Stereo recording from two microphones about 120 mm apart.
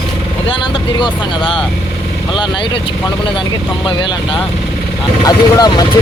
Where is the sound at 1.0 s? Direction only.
40° left (ahead or behind).